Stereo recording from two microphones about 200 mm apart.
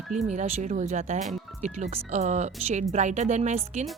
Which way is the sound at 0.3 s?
35° right (ahead or behind).